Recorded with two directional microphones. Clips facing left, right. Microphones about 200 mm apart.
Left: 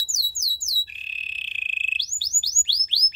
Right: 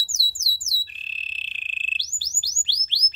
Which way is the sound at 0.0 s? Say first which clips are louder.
Right 3 dB; 15° left (ahead or behind).